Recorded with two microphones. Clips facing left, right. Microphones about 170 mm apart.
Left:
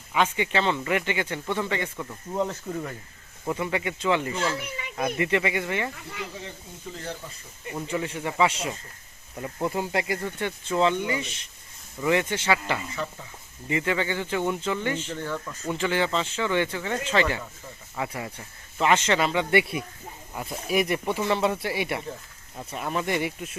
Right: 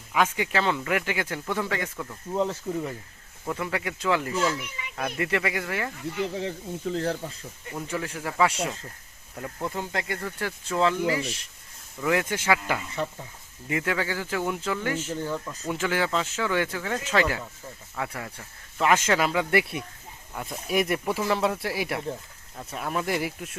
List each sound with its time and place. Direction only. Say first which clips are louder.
0.1 s speech: even; 5° right (ahead or behind)
6.1 s speech: right 8 dB; 75° right (ahead or behind)
7.8 s speech: left 2 dB; centre (ahead or behind)
9.6 s speech: left 4 dB; 15° left (ahead or behind)